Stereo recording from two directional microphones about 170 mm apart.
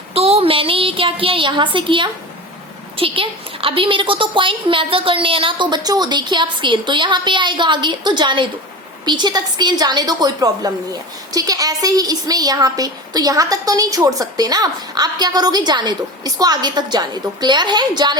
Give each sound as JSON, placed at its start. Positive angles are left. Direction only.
{"t": 0.1, "sound": "a woman's voice", "side_deg": -35}